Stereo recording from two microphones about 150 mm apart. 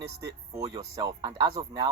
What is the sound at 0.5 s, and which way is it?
Speech, 20° right (ahead or behind).